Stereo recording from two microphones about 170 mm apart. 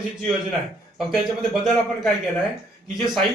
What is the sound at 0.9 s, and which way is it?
Speech, centre (ahead or behind).